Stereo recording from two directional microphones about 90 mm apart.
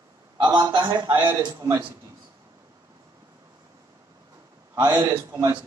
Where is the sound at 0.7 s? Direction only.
65° right (ahead or behind).